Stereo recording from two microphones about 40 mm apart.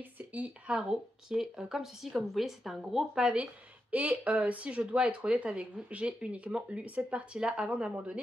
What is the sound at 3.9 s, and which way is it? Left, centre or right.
A woman's voice, right.